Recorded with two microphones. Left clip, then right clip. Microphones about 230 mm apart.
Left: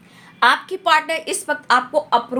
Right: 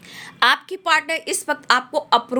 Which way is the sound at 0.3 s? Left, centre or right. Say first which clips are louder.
Left 2 dB; right.